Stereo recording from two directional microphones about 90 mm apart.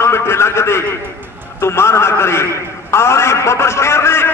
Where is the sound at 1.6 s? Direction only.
30° left (ahead or behind).